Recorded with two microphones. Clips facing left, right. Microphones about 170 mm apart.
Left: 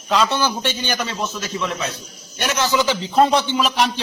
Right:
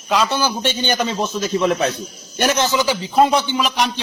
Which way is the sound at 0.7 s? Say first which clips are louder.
Right 4 dB; 25° right (ahead or behind).